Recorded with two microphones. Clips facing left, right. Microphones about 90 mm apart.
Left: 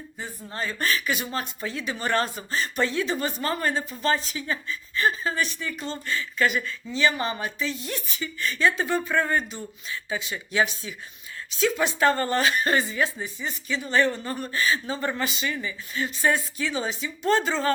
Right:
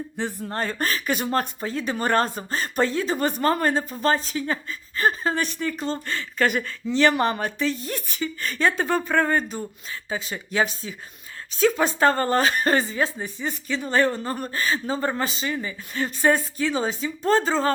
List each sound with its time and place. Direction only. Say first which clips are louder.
0.2 s speech: right 5 dB; 60° right (ahead or behind)
1.6 s speech: right 4 dB; 40° right (ahead or behind)
3.2 s speech: right 5 dB; 50° right (ahead or behind); by 17.7 s 35° right (ahead or behind)